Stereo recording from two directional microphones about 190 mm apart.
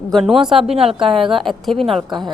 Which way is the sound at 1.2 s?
Centre (ahead or behind).